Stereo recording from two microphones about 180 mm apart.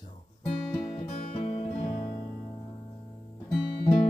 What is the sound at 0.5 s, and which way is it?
Music, 30° left (ahead or behind).